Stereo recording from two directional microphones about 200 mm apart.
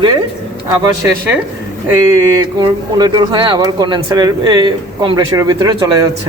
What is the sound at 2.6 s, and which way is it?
Speech, 20° right (ahead or behind).